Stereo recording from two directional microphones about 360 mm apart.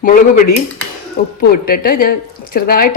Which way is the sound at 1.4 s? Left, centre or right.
Left.